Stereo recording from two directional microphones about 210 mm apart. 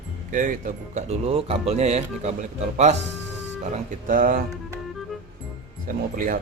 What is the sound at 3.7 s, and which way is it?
Speech, 40° right (ahead or behind).